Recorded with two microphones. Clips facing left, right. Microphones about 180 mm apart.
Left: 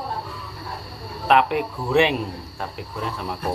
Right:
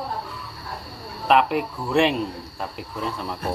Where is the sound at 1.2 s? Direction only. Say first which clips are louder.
Even; centre (ahead or behind).